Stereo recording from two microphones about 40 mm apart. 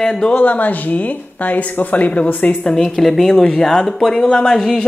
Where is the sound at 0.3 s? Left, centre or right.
Left.